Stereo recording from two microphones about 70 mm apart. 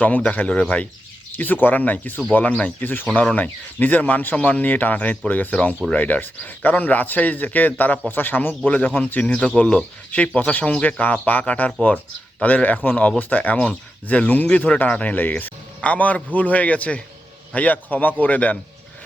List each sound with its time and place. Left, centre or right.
0.0 s a man's voice: left